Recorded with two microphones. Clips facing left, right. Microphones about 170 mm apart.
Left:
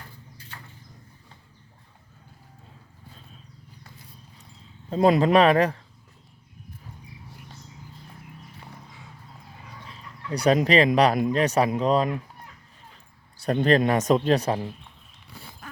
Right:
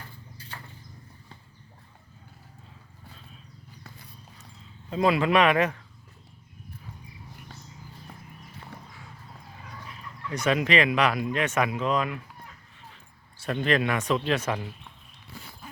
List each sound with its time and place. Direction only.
4.9 s speech: 40° left (ahead or behind)
8.6 s a sound: 20° left (ahead or behind)
9.8 s speech: 30° left (ahead or behind)
13.4 s speech: 35° left (ahead or behind)